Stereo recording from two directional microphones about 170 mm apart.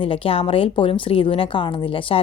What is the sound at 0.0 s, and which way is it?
A woman's voice, 35° left (ahead or behind).